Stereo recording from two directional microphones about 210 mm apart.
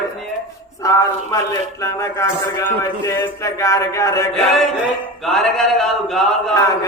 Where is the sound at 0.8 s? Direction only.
15° left (ahead or behind).